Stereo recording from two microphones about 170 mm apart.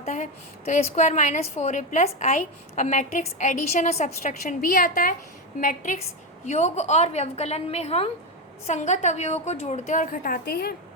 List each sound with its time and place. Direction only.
0.0 s a woman's voice: 45° left (ahead or behind); by 10.8 s 65° left (ahead or behind)